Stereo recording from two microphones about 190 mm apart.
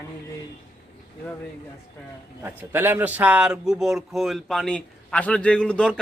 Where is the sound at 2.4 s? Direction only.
10° right (ahead or behind).